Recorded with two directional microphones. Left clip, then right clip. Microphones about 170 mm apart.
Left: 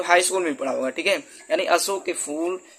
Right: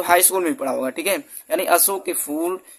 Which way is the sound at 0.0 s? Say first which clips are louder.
Right 2 dB; 35° right (ahead or behind).